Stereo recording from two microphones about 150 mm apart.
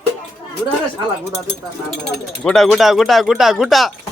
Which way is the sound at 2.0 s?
Centre (ahead or behind).